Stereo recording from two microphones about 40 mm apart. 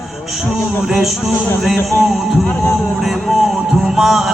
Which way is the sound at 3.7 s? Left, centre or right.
Centre.